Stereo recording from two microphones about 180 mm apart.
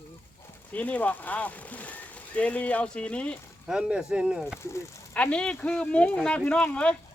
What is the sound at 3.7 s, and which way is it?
Speech, 5° right (ahead or behind).